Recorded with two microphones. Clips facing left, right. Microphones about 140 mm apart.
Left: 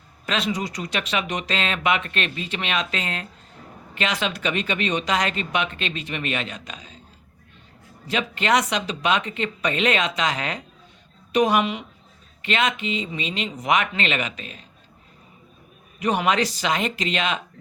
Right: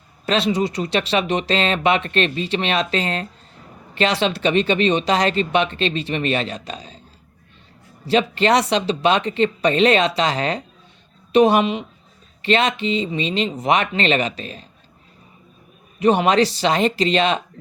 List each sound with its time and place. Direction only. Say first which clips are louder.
0.3 s speech: right 6 dB; 30° right (ahead or behind)
8.0 s a woman's voice: right 7 dB; 30° right (ahead or behind)
16.0 s speech: right 6 dB; 30° right (ahead or behind)